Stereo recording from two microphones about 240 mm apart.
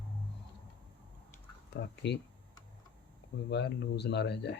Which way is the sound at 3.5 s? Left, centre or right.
Left.